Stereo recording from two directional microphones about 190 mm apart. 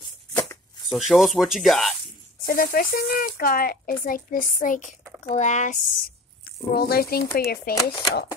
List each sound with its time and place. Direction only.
0.3 s a sound: 20° left (ahead or behind)
0.8 s speech: centre (ahead or behind)
2.4 s speech: 50° left (ahead or behind)
6.4 s speech: 55° left (ahead or behind)
7.7 s speech: 20° left (ahead or behind)